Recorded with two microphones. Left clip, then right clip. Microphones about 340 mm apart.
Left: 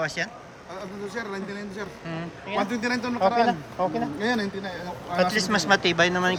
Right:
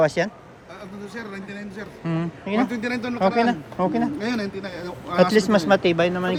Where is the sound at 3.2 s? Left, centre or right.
Right.